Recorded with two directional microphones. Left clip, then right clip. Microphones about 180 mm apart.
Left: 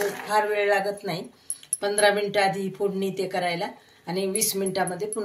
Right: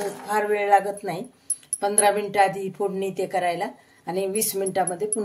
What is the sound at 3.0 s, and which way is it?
Speech, 45° right (ahead or behind).